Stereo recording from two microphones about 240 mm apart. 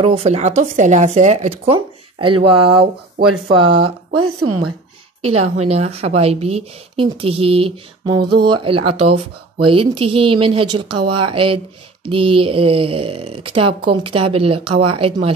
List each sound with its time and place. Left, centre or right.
0.0 s speech: right
4.1 s speech: right
5.7 s speech: right
10.9 s speech: right
11.1 s speech: right